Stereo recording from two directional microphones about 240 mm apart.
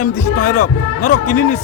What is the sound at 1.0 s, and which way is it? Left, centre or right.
Speech, left.